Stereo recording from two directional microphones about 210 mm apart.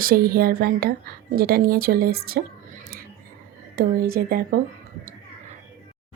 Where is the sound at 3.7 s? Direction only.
45° right (ahead or behind).